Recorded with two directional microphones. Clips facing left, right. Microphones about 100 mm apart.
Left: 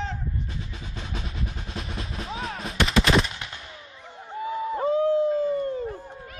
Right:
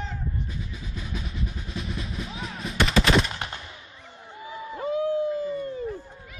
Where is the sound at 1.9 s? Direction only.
35° left (ahead or behind).